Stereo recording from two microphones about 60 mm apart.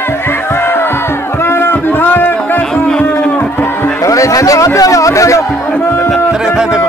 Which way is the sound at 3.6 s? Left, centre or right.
Left.